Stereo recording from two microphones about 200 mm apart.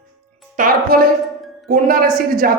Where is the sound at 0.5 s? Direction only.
45° right (ahead or behind).